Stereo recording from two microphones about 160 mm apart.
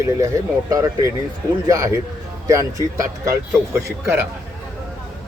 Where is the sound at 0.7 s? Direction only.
20° right (ahead or behind).